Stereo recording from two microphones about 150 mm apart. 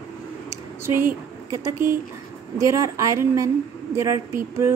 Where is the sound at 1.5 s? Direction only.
15° right (ahead or behind).